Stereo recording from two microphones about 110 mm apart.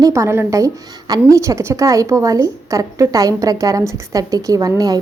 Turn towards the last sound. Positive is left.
turn(degrees=-35)  # may be behind; listen again after turning